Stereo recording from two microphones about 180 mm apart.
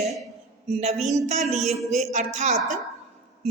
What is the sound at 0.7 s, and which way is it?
Speech, 35° right (ahead or behind).